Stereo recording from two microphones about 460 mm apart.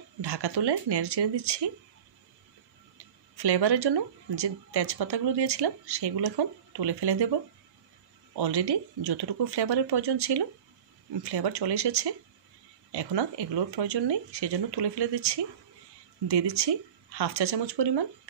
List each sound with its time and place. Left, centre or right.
0.2 s speech: right
3.3 s speech: right
8.4 s speech: right